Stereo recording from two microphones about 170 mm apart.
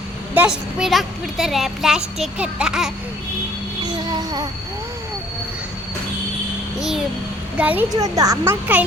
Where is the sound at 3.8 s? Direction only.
25° right (ahead or behind).